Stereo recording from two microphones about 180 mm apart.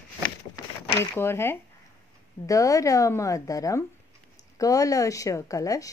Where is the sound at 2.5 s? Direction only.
20° left (ahead or behind).